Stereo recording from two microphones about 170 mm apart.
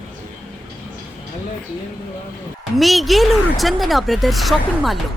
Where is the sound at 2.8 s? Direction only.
Centre (ahead or behind).